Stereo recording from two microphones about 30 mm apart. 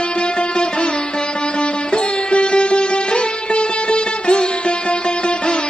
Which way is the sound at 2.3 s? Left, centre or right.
Left.